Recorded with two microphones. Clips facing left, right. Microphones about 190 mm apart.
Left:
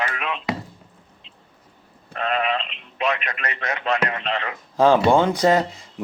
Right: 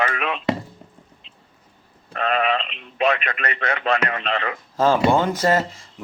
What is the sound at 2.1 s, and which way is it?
Sheep, 70° right (ahead or behind).